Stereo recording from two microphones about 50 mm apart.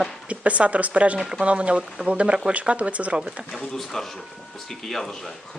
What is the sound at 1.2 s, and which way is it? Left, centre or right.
Speech, centre.